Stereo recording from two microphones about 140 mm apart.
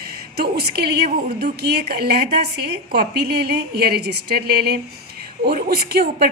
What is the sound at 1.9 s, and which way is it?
Speech, 90° right.